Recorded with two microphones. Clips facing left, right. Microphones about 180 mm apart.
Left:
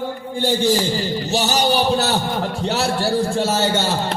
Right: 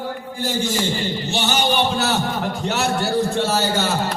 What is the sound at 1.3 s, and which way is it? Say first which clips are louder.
A man's voice: left 2 dB; 35° left (ahead or behind).